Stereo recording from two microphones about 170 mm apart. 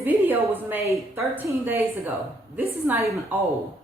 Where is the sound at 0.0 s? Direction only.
10° right (ahead or behind).